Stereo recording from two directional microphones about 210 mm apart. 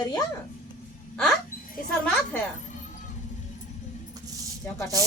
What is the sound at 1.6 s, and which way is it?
Wind chime, 40° left (ahead or behind).